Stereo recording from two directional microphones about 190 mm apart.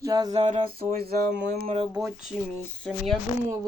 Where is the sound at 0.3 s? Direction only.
35° right (ahead or behind).